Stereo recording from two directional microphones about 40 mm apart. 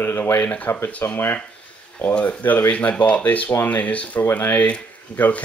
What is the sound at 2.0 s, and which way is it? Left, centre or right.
Speech, left.